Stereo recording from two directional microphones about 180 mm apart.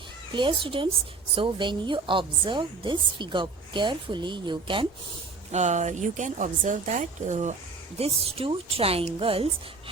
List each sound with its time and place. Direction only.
0.3 s a woman's voice: 30° right (ahead or behind)
5.5 s speech: 40° right (ahead or behind)